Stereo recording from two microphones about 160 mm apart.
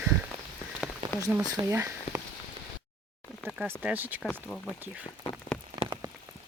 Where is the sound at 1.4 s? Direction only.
25° right (ahead or behind).